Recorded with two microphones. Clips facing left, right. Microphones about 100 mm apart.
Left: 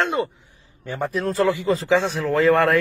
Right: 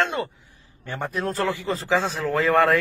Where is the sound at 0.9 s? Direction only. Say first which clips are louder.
Left 4 dB; centre (ahead or behind).